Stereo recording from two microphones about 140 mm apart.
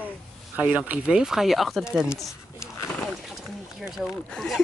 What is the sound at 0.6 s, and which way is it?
Speech, 10° right (ahead or behind).